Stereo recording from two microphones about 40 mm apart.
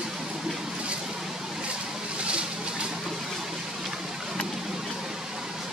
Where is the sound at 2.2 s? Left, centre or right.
Right.